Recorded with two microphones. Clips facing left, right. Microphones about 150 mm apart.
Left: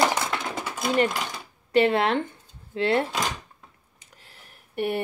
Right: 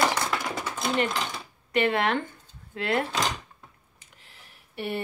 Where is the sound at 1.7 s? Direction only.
30° left (ahead or behind).